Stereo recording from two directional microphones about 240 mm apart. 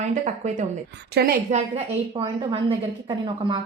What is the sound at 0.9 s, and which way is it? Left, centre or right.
Speech, right.